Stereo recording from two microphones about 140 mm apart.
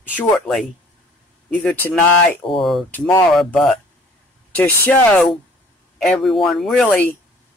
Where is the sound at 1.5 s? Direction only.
10° left (ahead or behind).